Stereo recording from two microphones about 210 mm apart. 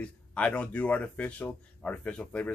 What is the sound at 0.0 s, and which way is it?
Speech, 5° left (ahead or behind).